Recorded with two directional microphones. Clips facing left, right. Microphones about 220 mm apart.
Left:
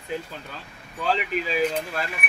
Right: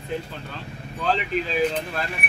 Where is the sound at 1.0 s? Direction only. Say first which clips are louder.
Right 1 dB; 5° left (ahead or behind).